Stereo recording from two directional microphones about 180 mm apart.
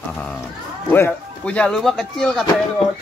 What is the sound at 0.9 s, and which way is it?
Speech, 10° left (ahead or behind).